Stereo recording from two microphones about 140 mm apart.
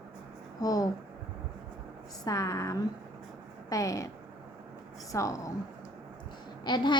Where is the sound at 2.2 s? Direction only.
20° left (ahead or behind).